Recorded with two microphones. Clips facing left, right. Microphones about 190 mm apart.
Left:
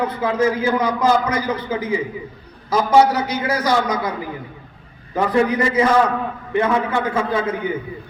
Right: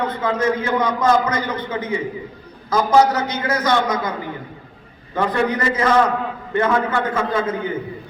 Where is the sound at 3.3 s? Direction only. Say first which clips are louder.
Left 1 dB; 10° left (ahead or behind).